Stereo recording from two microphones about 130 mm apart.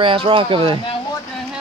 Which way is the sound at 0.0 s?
45° right (ahead or behind).